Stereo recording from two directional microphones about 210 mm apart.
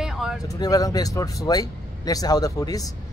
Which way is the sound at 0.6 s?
15° left (ahead or behind).